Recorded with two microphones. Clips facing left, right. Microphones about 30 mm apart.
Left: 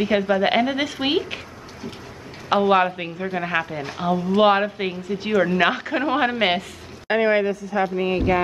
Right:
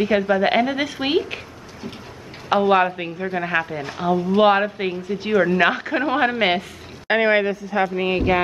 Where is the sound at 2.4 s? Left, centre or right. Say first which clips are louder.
Right 1 dB; centre.